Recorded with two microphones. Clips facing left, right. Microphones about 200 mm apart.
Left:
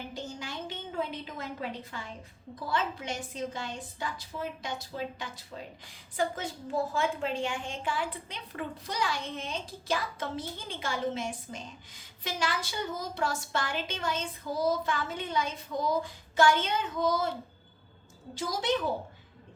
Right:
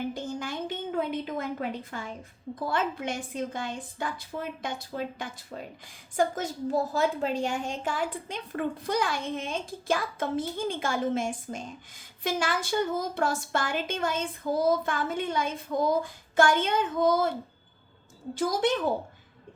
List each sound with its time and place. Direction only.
0.1 s a woman's voice: 50° right (ahead or behind)
18.3 s a woman's voice: 50° right (ahead or behind)